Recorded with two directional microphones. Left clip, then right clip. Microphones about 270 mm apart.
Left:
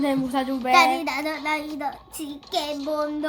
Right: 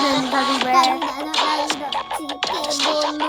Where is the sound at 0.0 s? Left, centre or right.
Right.